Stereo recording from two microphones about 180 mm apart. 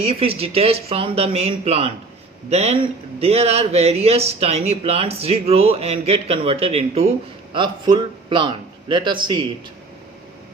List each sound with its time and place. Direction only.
0.0 s a man's voice: 35° right (ahead or behind)